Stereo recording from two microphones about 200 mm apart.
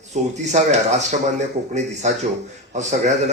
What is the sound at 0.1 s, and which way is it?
Speech, 35° right (ahead or behind).